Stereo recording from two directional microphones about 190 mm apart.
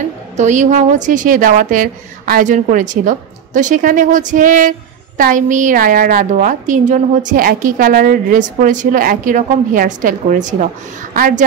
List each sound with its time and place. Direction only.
0.4 s a woman's voice: 40° right (ahead or behind)